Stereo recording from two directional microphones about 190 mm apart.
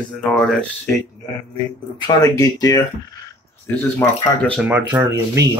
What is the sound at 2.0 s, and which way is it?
Speech, 20° left (ahead or behind).